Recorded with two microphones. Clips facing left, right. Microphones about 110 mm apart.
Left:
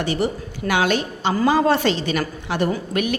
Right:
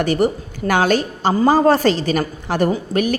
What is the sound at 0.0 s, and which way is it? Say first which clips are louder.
A woman's voice: right 5 dB; 45° right (ahead or behind).